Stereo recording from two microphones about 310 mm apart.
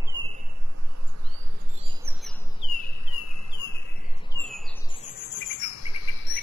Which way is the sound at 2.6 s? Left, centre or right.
Centre.